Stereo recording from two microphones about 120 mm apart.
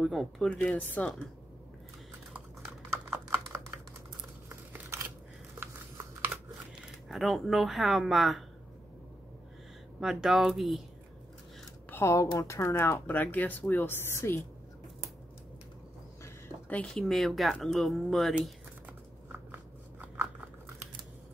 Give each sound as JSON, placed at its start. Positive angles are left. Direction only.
{"t": 0.0, "sound": "speech", "side_deg": 0}
{"t": 0.5, "sound": "speech", "side_deg": 15}
{"t": 2.9, "sound": "computer keyboard", "side_deg": -20}
{"t": 4.5, "sound": "a sound", "side_deg": -20}
{"t": 7.1, "sound": "speech", "side_deg": 0}
{"t": 9.9, "sound": "speech", "side_deg": -5}
{"t": 11.9, "sound": "speech", "side_deg": 20}
{"t": 16.4, "sound": "a sound", "side_deg": 10}
{"t": 17.0, "sound": "speech", "side_deg": 0}
{"t": 18.9, "sound": "crunch", "side_deg": -15}